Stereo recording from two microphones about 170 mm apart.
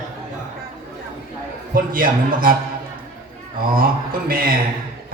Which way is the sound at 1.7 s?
55° right (ahead or behind).